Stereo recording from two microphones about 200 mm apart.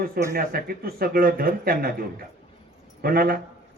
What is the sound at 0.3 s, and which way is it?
A man's voice, 50° right (ahead or behind).